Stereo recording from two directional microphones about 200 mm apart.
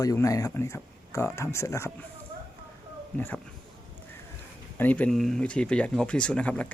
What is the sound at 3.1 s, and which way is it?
Speech, 10° left (ahead or behind).